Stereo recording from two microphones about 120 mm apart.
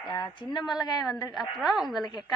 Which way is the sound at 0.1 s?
40° left (ahead or behind).